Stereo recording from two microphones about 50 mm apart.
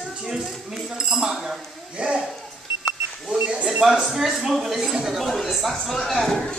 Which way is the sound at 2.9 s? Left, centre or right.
Right.